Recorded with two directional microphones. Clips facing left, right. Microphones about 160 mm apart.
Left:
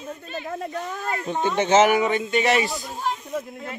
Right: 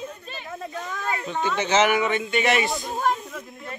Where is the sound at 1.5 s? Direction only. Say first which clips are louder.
Left 4 dB; 45° left (ahead or behind).